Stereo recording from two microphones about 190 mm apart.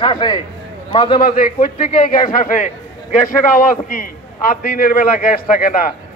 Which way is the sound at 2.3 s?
45° left (ahead or behind).